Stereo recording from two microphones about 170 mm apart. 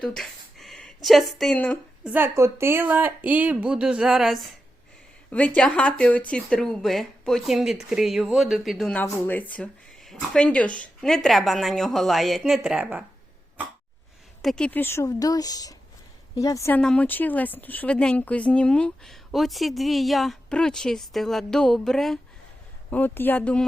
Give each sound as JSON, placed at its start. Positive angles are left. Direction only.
{"t": 0.0, "sound": "speech", "side_deg": 5}
{"t": 2.0, "sound": "speech", "side_deg": -10}
{"t": 5.3, "sound": "speech", "side_deg": 10}
{"t": 14.4, "sound": "a woman's voice", "side_deg": 5}